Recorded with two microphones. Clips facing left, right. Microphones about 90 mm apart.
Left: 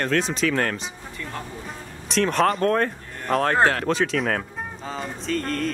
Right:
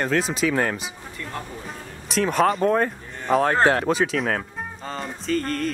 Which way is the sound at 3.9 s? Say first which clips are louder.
Right 1 dB; 5° right (ahead or behind).